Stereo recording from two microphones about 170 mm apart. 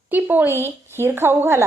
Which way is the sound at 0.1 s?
10° right (ahead or behind).